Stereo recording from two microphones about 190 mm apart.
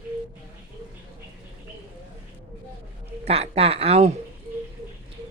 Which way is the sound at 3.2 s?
30° right (ahead or behind).